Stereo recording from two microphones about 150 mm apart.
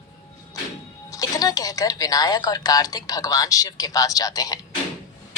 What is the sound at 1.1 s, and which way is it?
A woman's voice, 25° left (ahead or behind).